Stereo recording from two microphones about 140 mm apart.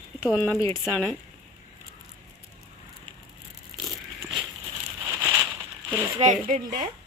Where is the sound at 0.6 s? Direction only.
15° left (ahead or behind).